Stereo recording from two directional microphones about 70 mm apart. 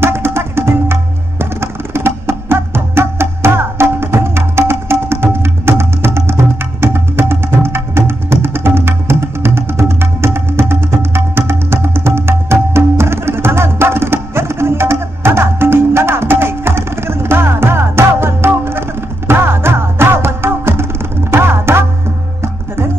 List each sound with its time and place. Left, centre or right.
0.0 s music: right